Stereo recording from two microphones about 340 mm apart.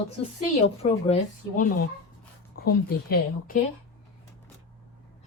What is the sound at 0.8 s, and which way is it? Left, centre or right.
A woman's voice, centre.